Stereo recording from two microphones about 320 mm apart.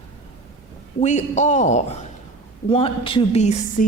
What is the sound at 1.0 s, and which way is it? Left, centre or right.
A woman's voice, left.